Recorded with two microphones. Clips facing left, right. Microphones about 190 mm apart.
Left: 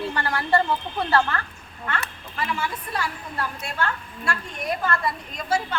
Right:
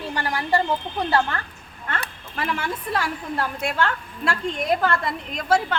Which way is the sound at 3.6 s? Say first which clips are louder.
Right 4 dB; 90° right.